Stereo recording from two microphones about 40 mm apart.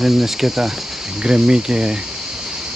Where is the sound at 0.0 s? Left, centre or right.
Centre.